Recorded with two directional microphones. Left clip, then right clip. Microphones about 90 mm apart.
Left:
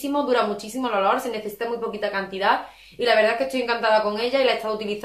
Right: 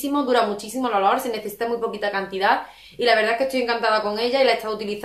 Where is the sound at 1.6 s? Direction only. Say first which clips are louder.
Right 4 dB; 35° right (ahead or behind).